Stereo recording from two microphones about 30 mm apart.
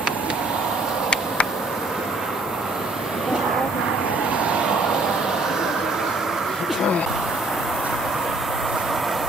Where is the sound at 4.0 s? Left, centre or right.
Right.